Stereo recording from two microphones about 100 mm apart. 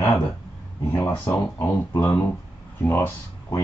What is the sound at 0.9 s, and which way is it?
Speech, 25° left (ahead or behind).